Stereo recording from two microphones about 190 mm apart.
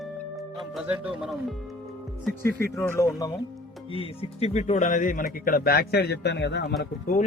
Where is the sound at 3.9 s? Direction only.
30° left (ahead or behind); by 6.7 s 65° left (ahead or behind).